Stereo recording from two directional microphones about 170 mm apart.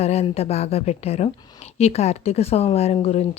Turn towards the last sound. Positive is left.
turn(degrees=40)  # may be behind; listen again after turning